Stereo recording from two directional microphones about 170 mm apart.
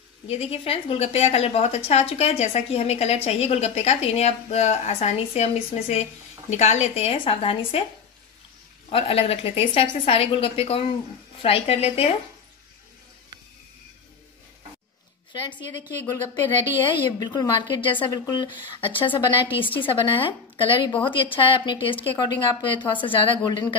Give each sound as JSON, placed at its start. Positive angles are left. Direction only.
{"t": 0.3, "sound": "a woman's voice", "side_deg": 35}
{"t": 8.9, "sound": "a woman's voice", "side_deg": 35}
{"t": 16.8, "sound": "a woman's voice", "side_deg": 25}